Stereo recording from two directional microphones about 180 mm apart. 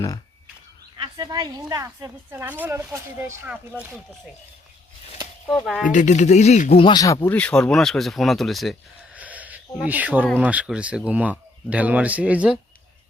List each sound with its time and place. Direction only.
1.0 s a woman's voice: 25° right (ahead or behind)
5.6 s speech: centre (ahead or behind)
5.9 s speech: 45° left (ahead or behind); by 8.7 s centre (ahead or behind)
9.1 s a sound: 10° right (ahead or behind)
9.8 s a woman's voice: 10° right (ahead or behind)